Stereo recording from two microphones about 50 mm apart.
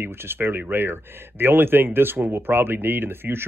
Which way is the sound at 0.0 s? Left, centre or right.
Right.